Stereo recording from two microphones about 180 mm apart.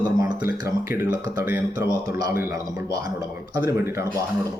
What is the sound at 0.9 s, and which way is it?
Speech, 10° right (ahead or behind).